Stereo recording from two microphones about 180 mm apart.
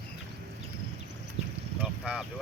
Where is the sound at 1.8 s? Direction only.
10° right (ahead or behind).